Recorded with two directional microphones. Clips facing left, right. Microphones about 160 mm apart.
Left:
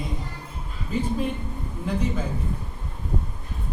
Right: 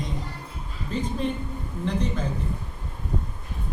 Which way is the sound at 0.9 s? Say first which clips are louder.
Left 1 dB; 10° left (ahead or behind).